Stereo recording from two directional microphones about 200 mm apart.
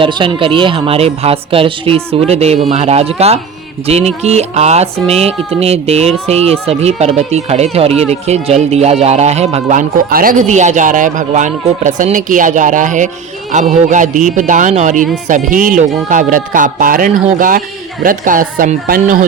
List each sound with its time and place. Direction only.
0.0 s speech: 25° right (ahead or behind); by 19.2 s 45° right (ahead or behind)